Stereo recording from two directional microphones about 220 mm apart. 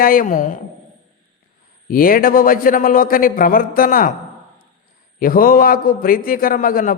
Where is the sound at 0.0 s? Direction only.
40° left (ahead or behind).